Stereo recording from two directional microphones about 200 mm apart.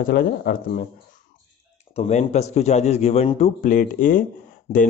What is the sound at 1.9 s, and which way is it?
Speech, 35° left (ahead or behind).